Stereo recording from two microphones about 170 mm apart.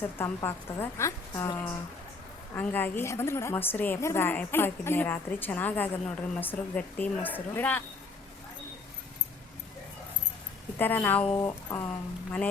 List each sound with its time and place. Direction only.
0.2 s a woman's voice: 15° left (ahead or behind)
10.8 s a woman's voice: 10° left (ahead or behind)